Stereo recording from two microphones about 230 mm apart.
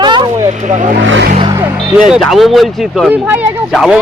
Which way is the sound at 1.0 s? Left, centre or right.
Right.